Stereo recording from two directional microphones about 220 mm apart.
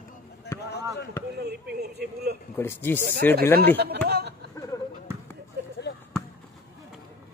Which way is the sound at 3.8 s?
45° right (ahead or behind).